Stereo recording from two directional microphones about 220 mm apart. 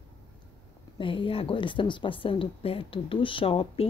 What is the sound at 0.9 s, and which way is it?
A woman's voice, 25° left (ahead or behind).